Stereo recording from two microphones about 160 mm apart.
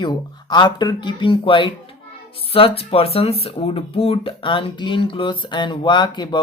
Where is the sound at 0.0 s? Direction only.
30° left (ahead or behind).